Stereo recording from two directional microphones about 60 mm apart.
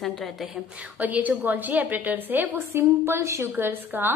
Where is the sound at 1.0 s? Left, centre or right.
Right.